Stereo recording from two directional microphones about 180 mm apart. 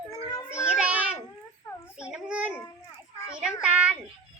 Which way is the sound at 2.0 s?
5° right (ahead or behind).